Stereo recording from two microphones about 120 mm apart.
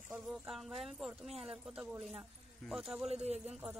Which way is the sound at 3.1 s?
65° right (ahead or behind).